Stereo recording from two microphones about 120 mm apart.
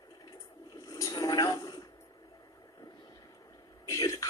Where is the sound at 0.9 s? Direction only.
30° left (ahead or behind).